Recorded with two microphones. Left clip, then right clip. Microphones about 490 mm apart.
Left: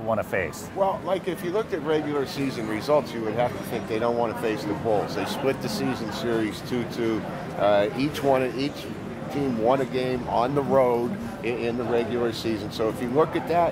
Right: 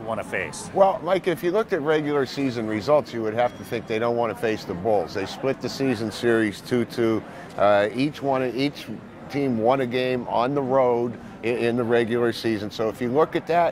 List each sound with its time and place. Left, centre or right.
0.1 s speech: left
0.7 s speech: right
5.1 s speech: right
8.3 s speech: right
10.7 s speech: right
11.6 s speech: right